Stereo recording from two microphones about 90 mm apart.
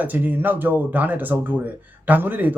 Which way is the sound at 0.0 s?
20° right (ahead or behind).